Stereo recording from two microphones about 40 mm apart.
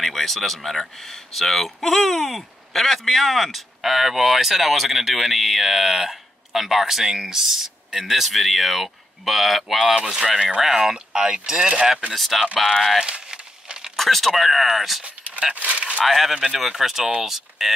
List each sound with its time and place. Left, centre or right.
0.0 s speech: centre; by 11.9 s right
12.1 s speech: centre
13.0 s crumpling: centre
13.9 s speech: centre
15.5 s speech: right
16.1 s speech: centre
16.3 s speech: centre